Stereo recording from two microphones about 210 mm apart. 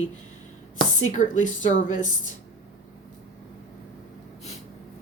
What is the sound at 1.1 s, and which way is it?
Speech, 35° left (ahead or behind).